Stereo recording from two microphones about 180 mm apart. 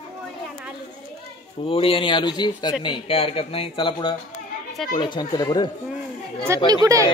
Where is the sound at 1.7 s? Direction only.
30° left (ahead or behind).